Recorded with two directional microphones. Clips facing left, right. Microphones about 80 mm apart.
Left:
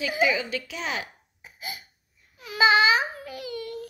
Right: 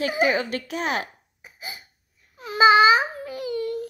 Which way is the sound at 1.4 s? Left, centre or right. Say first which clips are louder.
Even; right.